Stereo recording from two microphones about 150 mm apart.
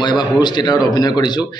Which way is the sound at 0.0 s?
30° left (ahead or behind).